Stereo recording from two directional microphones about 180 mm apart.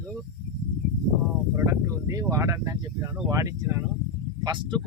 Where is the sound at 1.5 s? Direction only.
15° right (ahead or behind).